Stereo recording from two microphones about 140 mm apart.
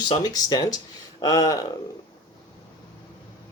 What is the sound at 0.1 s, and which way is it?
Speech, 30° left (ahead or behind).